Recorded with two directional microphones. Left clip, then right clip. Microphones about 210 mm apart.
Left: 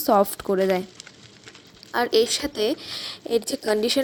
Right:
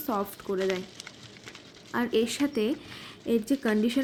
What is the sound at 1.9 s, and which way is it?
A woman's voice, 45° left (ahead or behind).